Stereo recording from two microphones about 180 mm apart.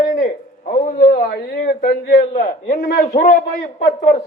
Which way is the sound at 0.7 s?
50° left (ahead or behind).